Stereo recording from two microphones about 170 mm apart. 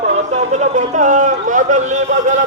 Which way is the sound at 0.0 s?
40° right (ahead or behind).